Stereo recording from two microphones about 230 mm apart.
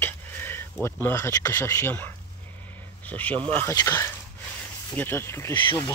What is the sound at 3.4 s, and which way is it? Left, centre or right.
Speech, right.